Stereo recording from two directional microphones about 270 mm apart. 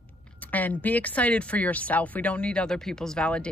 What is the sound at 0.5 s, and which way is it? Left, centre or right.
Speech, centre.